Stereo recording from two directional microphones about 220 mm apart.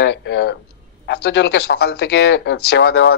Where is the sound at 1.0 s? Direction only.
50° left (ahead or behind).